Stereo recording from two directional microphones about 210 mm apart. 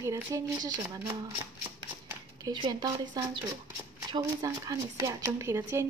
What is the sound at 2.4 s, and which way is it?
Speech, 20° right (ahead or behind).